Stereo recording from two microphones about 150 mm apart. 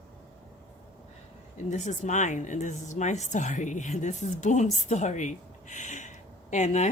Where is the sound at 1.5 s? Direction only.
50° left (ahead or behind).